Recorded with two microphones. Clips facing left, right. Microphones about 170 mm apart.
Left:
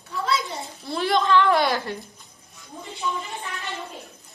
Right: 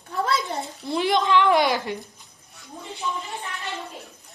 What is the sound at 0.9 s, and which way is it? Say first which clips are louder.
A woman's voice: even; 15° right (ahead or behind).